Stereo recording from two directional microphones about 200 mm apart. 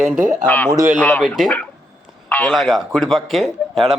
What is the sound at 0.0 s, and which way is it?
Speech, 5° right (ahead or behind).